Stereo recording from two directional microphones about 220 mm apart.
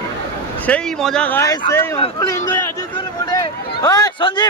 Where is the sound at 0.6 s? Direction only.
5° left (ahead or behind); by 4.4 s 20° left (ahead or behind).